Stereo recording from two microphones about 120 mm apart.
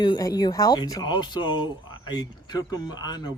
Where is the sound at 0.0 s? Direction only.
35° left (ahead or behind).